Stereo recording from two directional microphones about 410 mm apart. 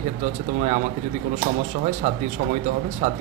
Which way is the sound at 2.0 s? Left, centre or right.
Centre.